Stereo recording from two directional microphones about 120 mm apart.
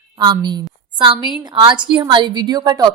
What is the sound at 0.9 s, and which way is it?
Speech, 45° right (ahead or behind).